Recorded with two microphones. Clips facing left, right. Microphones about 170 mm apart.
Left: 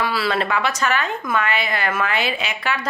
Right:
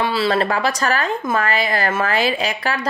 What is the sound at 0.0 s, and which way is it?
A woman's voice, 25° right (ahead or behind).